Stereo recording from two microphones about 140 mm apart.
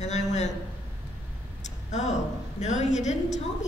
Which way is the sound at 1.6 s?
55° left (ahead or behind).